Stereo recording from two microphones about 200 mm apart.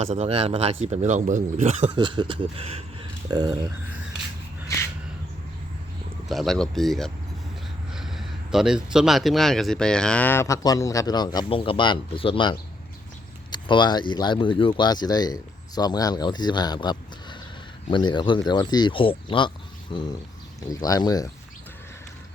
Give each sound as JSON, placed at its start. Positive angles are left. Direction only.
{"t": 0.0, "sound": "speech", "side_deg": -30}
{"t": 6.2, "sound": "speech", "side_deg": 0}